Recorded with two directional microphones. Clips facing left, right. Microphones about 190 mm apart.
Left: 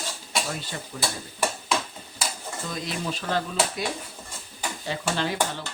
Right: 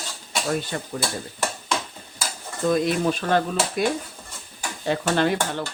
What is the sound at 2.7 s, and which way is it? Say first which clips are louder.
Stir: right 12 dB; 55° right (ahead or behind).